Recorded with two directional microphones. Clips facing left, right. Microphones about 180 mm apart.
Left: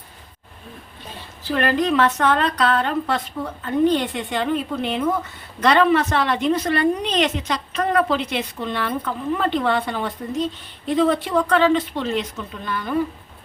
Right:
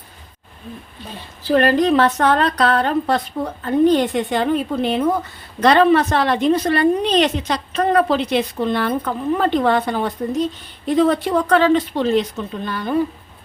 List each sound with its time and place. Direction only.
1.5 s a woman's voice: 35° right (ahead or behind)